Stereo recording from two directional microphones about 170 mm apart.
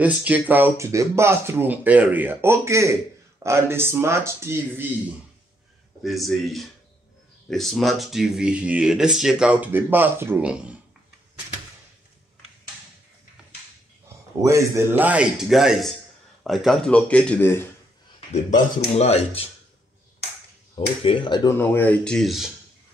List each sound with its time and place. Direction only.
0.0 s speech: 10° right (ahead or behind)
6.0 s speech: centre (ahead or behind)
14.0 s speech: 15° right (ahead or behind); by 17.6 s 10° left (ahead or behind)
18.9 s speech: 40° left (ahead or behind)
21.0 s speech: 30° left (ahead or behind); by 22.5 s centre (ahead or behind)